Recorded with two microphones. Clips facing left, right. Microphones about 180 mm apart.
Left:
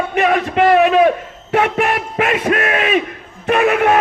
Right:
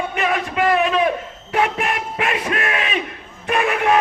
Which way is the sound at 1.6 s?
40° left (ahead or behind).